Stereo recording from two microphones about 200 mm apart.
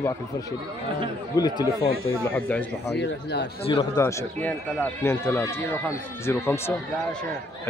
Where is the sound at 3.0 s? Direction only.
60° left (ahead or behind).